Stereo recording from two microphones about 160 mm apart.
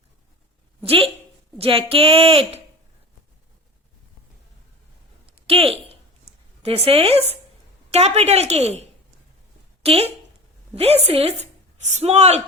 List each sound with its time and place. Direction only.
0.8 s a woman's voice: 35° right (ahead or behind)
5.2 s a sound: 35° right (ahead or behind)
6.6 s a woman's voice: 40° right (ahead or behind)